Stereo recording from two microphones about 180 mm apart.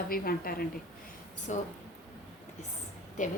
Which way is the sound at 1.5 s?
40° left (ahead or behind).